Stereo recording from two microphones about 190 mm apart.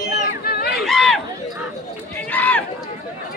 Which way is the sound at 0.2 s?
55° left (ahead or behind).